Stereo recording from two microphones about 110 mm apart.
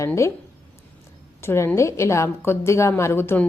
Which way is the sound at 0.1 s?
25° left (ahead or behind).